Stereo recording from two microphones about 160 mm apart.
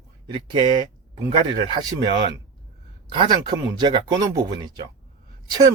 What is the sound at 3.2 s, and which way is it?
Speech, 25° right (ahead or behind).